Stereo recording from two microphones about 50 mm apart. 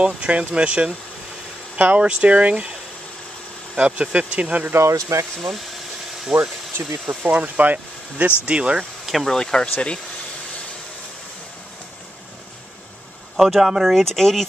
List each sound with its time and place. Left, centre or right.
0.0 s speech: right
1.8 s speech: right
4.7 s speech: right
6.3 s speech: centre
7.1 s speech: right
9.0 s a sound: centre
9.3 s speech: centre
13.4 s speech: centre
13.9 s speech: centre